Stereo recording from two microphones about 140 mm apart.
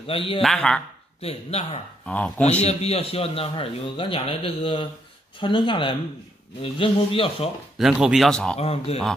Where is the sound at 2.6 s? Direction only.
50° left (ahead or behind).